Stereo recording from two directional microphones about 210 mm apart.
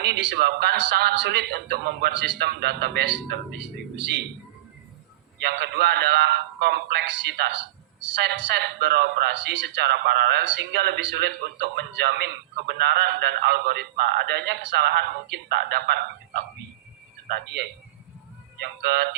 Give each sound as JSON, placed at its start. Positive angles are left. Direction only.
{"t": 0.0, "sound": "speech", "side_deg": -50}
{"t": 5.4, "sound": "speech", "side_deg": -50}
{"t": 17.2, "sound": "speech", "side_deg": -50}